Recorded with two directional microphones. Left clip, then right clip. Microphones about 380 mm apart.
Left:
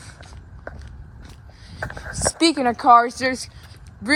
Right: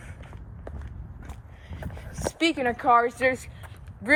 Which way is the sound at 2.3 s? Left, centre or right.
Centre.